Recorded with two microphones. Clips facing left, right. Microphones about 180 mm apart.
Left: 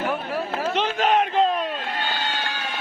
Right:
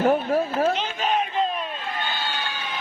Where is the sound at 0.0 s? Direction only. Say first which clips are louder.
Right 6 dB; 40° right (ahead or behind).